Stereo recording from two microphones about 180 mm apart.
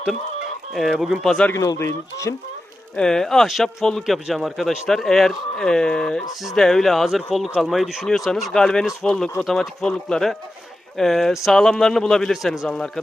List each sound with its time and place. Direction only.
0.7 s speech: centre (ahead or behind)
1.5 s speech: 15° left (ahead or behind)
2.9 s speech: 5° left (ahead or behind)